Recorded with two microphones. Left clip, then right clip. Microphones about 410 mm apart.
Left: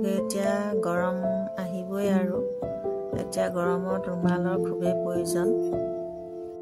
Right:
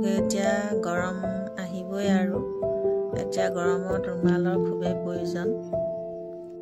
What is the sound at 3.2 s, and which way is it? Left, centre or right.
Speech, left.